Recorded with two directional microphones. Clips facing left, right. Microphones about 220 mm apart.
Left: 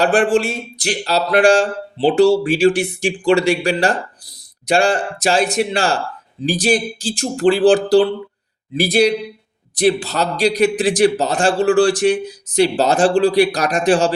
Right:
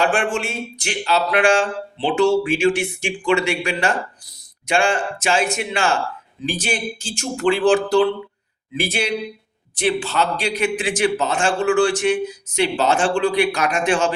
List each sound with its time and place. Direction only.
0.0 s a man's voice: 35° left (ahead or behind)